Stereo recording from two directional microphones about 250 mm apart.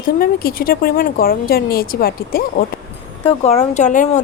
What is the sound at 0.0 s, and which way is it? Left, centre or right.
A woman's voice, left.